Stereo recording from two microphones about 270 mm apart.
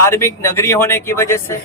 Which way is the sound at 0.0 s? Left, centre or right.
Centre.